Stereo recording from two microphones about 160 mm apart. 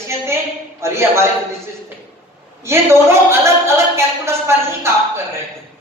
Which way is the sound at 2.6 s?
15° right (ahead or behind).